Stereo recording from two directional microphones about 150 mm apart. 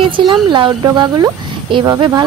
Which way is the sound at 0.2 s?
30° right (ahead or behind).